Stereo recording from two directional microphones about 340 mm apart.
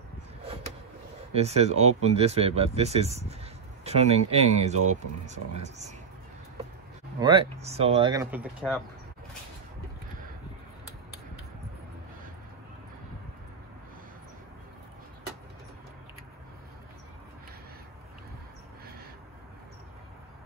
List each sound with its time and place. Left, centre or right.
1.3 s speech: centre
7.2 s speech: centre